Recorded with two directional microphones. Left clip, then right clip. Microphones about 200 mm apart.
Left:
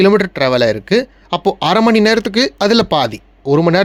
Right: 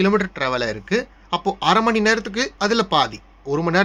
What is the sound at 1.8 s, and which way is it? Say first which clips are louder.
A man's voice: left 6 dB; 55° left (ahead or behind).